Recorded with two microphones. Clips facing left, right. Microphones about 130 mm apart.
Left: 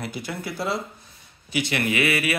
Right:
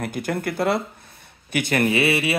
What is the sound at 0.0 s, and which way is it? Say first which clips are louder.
Speech: right 6 dB; 50° right (ahead or behind).